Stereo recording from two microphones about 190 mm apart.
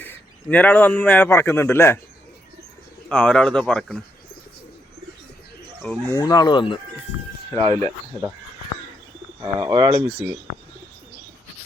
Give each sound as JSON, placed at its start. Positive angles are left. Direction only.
{"t": 0.0, "sound": "a man's voice", "side_deg": 10}
{"t": 3.1, "sound": "speech", "side_deg": 5}
{"t": 5.8, "sound": "speech", "side_deg": 5}
{"t": 6.1, "sound": "speech", "side_deg": 20}
{"t": 7.5, "sound": "speech", "side_deg": -30}
{"t": 9.4, "sound": "speech", "side_deg": -20}
{"t": 10.1, "sound": "speech", "side_deg": -5}